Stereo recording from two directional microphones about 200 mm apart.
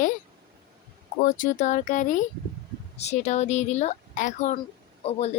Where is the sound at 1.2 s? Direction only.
40° left (ahead or behind).